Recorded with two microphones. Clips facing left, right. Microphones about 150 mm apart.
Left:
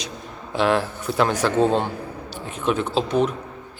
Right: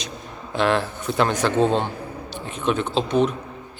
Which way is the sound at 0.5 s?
10° left (ahead or behind).